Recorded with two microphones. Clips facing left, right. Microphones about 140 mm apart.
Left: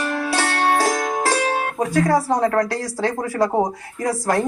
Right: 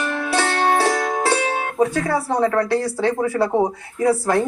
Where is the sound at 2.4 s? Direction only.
40° left (ahead or behind).